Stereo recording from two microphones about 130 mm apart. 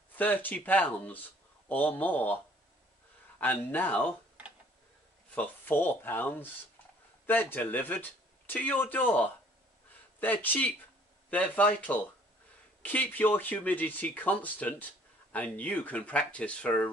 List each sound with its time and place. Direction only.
0.2 s speech: 15° left (ahead or behind)
5.3 s speech: 15° left (ahead or behind)